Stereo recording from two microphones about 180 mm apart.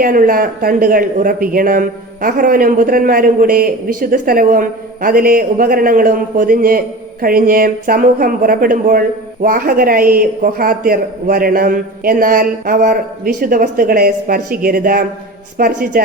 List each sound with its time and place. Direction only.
0.0 s speech: 50° right (ahead or behind)